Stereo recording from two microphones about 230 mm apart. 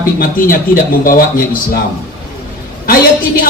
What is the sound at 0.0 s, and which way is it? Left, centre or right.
Speech, left.